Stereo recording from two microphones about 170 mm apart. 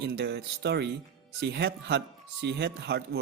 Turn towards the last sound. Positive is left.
turn(degrees=-75)  # may be behind; listen again after turning